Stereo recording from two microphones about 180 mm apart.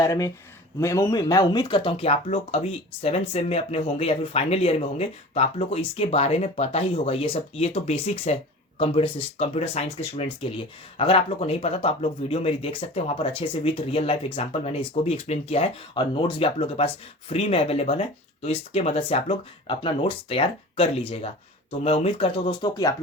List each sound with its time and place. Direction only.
0.0 s speech: 20° left (ahead or behind)